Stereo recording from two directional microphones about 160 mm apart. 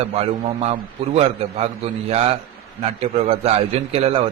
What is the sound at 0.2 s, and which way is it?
A man's voice, 40° right (ahead or behind).